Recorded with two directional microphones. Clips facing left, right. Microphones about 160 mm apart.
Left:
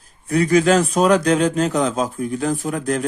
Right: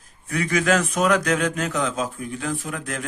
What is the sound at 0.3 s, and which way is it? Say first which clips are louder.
Speech: left 6 dB; 35° left (ahead or behind).